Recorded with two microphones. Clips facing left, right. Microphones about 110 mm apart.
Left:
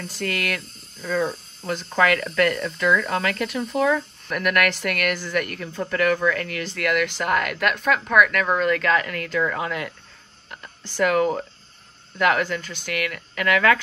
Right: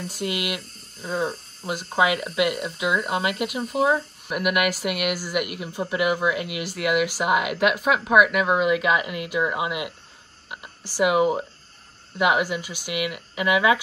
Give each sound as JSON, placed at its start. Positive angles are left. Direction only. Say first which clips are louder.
{"t": 0.2, "sound": "speech", "louder": "left 1 dB", "side_deg": -10}
{"t": 0.9, "sound": "speech", "louder": "left 2 dB", "side_deg": -45}
{"t": 1.6, "sound": "speech", "louder": "left 1 dB", "side_deg": -10}
{"t": 11.0, "sound": "speech", "louder": "even", "side_deg": -10}